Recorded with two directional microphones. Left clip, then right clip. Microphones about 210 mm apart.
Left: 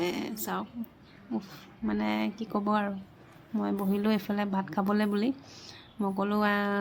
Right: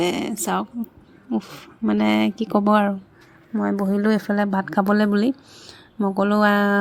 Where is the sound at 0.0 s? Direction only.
40° right (ahead or behind).